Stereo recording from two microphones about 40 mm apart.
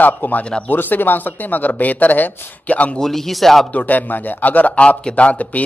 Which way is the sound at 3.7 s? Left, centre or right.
Left.